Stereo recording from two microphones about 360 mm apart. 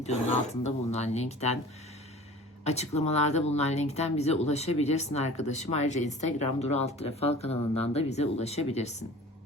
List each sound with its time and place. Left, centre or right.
0.0 s speech: centre
2.6 s speech: centre